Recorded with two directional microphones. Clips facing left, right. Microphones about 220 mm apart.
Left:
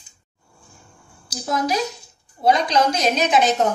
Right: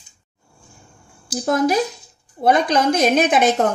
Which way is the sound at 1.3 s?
55° right (ahead or behind).